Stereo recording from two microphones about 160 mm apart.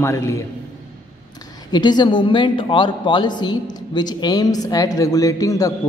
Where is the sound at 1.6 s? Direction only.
25° left (ahead or behind).